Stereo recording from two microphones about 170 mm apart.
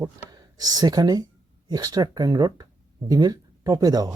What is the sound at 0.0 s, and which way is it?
Speech, 20° right (ahead or behind).